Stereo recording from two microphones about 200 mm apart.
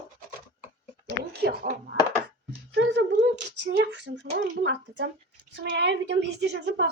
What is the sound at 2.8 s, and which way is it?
Speech, 65° right (ahead or behind).